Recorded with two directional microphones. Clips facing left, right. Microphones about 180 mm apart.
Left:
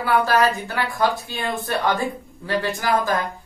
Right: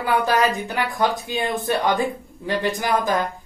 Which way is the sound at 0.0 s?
20° right (ahead or behind).